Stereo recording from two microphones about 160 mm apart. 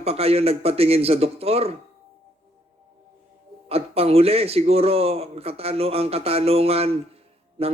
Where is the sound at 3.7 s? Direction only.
40° right (ahead or behind).